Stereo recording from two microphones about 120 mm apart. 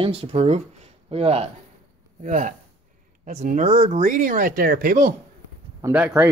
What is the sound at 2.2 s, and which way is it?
Speech, 90° right.